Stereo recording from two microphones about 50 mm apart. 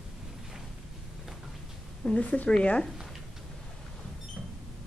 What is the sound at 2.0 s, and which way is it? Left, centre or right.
Speech, left.